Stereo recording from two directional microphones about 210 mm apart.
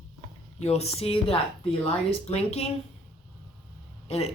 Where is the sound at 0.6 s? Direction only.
30° left (ahead or behind).